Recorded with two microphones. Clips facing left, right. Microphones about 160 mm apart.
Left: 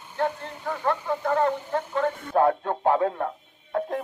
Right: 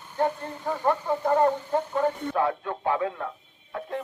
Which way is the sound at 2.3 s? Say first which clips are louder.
Left 5 dB; 40° left (ahead or behind).